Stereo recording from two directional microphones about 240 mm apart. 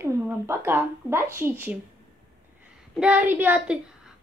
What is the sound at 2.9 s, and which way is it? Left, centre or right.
A woman's voice, centre.